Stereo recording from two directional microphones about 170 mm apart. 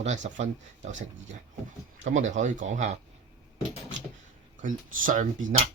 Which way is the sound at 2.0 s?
45° right (ahead or behind).